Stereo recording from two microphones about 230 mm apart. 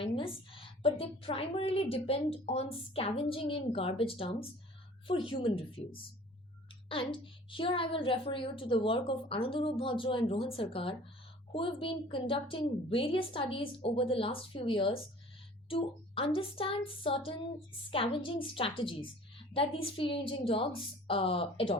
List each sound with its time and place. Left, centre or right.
0.0 s a woman's voice: left